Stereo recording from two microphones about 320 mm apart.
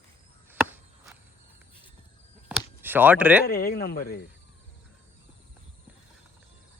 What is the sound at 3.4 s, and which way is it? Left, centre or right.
Speech, left.